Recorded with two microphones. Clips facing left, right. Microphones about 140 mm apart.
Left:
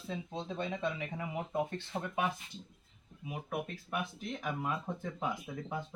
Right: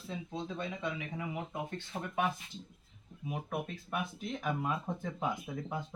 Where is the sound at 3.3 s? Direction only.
5° left (ahead or behind).